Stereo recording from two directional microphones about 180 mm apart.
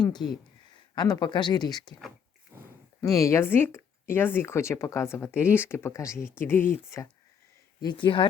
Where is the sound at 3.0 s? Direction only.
20° left (ahead or behind).